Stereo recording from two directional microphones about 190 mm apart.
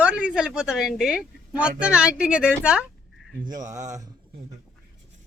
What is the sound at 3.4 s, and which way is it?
Speech, 20° right (ahead or behind).